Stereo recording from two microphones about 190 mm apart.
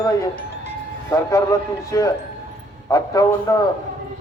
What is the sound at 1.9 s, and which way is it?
A man's voice, 15° left (ahead or behind).